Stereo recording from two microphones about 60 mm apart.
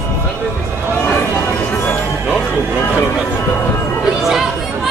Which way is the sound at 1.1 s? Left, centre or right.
Left.